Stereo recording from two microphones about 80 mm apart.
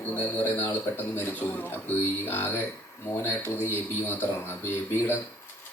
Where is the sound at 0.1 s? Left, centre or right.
Left.